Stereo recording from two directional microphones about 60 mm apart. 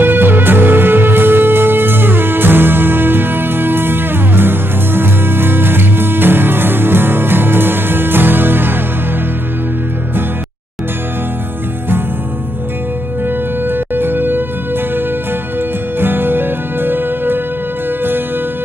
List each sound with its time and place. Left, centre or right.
0.0 s music: right
13.7 s music: right
16.0 s music: right